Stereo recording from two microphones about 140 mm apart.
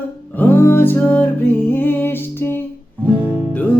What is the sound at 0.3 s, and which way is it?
Music, 15° left (ahead or behind).